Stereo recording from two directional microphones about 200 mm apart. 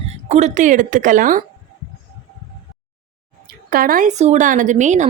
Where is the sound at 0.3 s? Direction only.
35° right (ahead or behind).